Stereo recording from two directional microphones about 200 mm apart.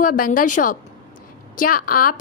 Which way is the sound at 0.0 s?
45° left (ahead or behind).